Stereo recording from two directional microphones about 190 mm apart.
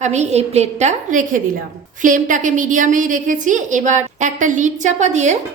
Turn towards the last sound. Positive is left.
turn(degrees=-40)  # may be behind; listen again after turning